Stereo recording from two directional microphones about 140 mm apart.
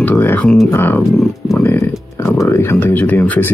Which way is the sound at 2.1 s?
20° left (ahead or behind).